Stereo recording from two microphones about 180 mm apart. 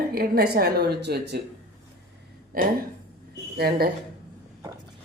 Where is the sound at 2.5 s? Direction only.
50° right (ahead or behind).